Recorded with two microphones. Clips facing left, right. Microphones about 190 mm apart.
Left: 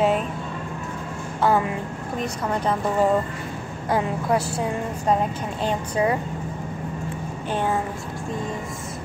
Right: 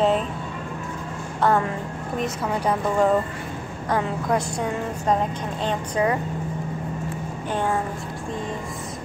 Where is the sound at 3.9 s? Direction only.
5° left (ahead or behind).